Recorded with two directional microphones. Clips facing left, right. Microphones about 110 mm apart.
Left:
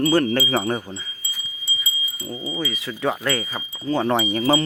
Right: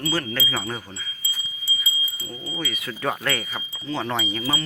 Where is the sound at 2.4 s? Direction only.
20° left (ahead or behind).